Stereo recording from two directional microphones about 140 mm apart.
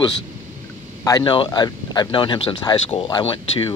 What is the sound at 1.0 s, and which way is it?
Speech, 30° left (ahead or behind).